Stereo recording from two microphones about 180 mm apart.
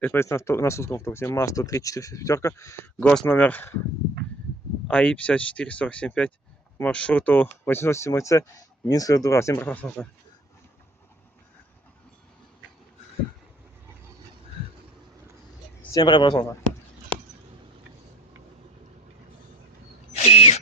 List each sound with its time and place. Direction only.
0.0 s speech: 15° left (ahead or behind)
4.9 s speech: 5° left (ahead or behind)
15.8 s speech: 20° left (ahead or behind)
20.1 s a sound: 35° left (ahead or behind)